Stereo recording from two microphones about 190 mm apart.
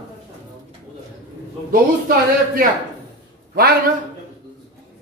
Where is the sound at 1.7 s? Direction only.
50° right (ahead or behind).